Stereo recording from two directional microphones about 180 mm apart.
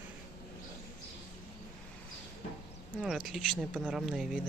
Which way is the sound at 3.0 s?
Centre (ahead or behind).